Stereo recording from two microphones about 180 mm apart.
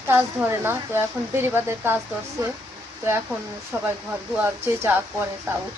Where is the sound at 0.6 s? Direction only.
15° right (ahead or behind).